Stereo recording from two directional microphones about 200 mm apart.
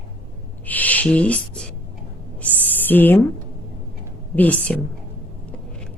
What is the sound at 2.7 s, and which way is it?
Speech, 10° left (ahead or behind).